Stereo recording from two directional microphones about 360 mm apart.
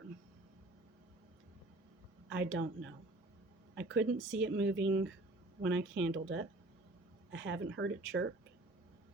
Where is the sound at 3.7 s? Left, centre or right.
Right.